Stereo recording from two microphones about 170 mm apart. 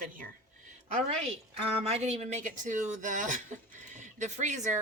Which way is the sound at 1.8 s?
40° right (ahead or behind).